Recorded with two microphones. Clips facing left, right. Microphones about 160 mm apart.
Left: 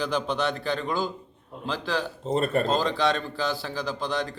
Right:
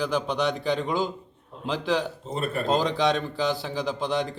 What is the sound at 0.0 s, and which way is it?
A man's voice, 10° right (ahead or behind).